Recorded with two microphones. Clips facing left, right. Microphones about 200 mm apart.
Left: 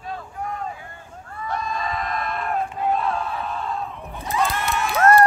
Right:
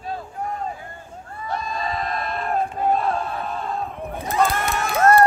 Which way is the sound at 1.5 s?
30° right (ahead or behind).